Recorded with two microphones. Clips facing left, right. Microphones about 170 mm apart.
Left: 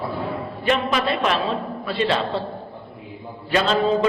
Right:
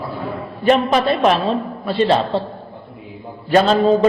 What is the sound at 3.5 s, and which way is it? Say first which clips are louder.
Speech: right 7 dB; 45° right (ahead or behind).